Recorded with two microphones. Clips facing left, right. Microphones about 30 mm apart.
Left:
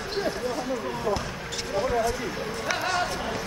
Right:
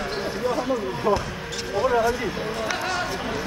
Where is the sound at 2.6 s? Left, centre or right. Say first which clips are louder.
Left 1 dB; centre.